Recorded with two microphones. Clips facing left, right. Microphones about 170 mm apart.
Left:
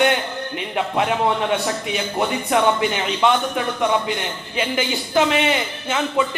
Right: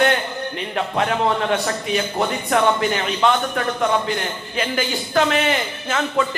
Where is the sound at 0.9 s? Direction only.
15° left (ahead or behind).